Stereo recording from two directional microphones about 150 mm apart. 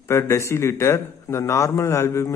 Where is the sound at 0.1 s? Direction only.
20° left (ahead or behind).